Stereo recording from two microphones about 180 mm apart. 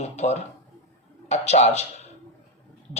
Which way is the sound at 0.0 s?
35° left (ahead or behind).